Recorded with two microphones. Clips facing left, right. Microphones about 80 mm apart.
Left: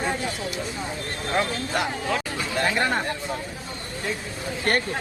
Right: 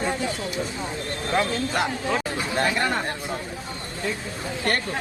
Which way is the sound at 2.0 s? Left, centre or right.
Right.